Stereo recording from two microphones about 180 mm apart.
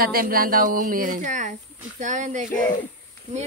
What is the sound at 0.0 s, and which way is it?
A woman's voice, 55° right (ahead or behind).